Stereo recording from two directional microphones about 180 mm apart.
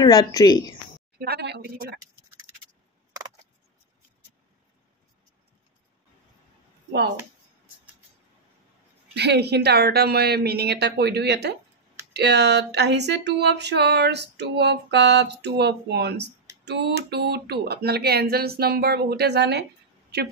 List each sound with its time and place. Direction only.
0.0 s a woman's voice: 20° left (ahead or behind)
1.2 s speech: 65° right (ahead or behind)
9.1 s speech: 65° right (ahead or behind)